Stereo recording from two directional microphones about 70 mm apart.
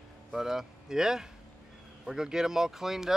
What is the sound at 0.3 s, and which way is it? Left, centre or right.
Speech, centre.